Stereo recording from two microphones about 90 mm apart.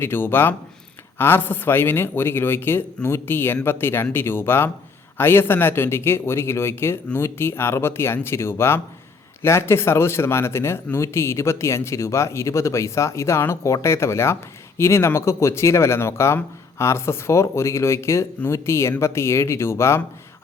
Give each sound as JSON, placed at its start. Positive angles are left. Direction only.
{"t": 0.0, "sound": "speech", "side_deg": 25}